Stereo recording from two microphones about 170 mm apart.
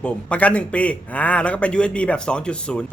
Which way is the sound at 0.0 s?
10° left (ahead or behind).